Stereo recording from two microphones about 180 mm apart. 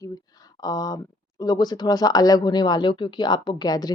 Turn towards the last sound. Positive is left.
turn(degrees=20)  # may be behind; listen again after turning